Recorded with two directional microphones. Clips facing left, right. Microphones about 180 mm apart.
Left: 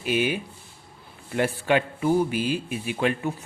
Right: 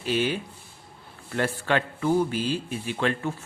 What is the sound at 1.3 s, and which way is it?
Speech, 15° left (ahead or behind).